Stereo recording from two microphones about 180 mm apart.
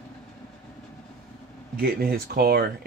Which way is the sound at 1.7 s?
55° right (ahead or behind).